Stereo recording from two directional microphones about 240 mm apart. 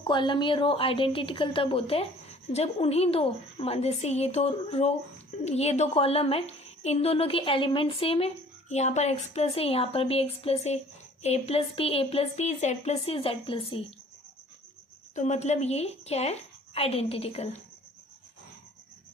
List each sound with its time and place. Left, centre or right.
0.0 s a woman's voice: centre
15.1 s a woman's voice: left